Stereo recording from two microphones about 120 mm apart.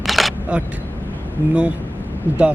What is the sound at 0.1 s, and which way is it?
Single-lens reflex camera, centre (ahead or behind).